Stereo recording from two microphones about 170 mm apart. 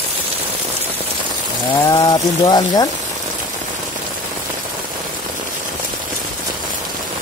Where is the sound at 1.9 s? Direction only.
25° left (ahead or behind).